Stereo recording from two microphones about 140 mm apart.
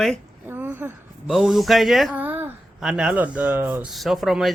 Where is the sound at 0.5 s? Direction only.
15° right (ahead or behind).